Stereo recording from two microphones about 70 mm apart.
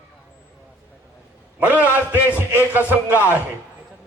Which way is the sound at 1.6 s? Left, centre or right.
Right.